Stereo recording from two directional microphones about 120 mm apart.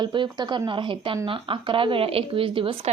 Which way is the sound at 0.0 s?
40° right (ahead or behind).